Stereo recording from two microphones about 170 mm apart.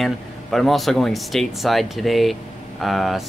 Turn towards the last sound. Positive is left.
turn(degrees=0)  # may be behind; listen again after turning